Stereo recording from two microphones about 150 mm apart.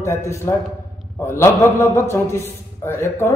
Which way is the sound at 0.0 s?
20° left (ahead or behind).